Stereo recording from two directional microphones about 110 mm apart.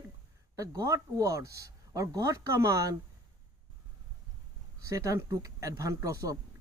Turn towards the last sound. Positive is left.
turn(degrees=-30)  # may be behind; listen again after turning